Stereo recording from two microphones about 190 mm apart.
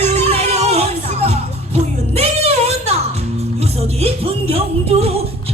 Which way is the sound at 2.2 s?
35° right (ahead or behind).